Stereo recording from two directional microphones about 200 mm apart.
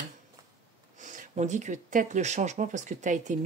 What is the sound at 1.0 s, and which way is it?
Speech, 40° right (ahead or behind).